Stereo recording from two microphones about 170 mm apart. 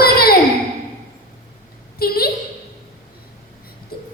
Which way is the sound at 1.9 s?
65° left (ahead or behind).